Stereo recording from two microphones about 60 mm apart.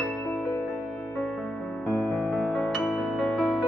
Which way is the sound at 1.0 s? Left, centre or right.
Left.